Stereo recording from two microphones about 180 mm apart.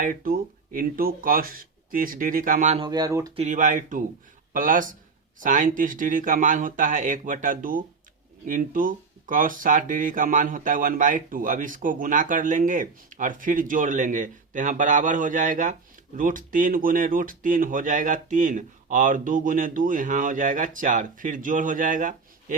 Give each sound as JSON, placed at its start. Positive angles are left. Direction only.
{"t": 0.0, "sound": "speech", "side_deg": -50}
{"t": 2.8, "sound": "speech", "side_deg": -20}
{"t": 3.3, "sound": "speech", "side_deg": -40}